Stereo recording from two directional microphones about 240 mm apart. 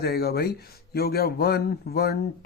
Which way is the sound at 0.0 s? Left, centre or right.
Left.